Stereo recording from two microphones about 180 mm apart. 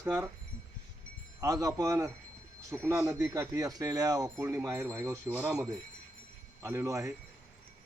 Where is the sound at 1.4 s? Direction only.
20° right (ahead or behind).